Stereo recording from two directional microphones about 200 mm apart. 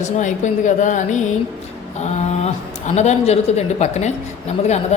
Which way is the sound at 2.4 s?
35° left (ahead or behind).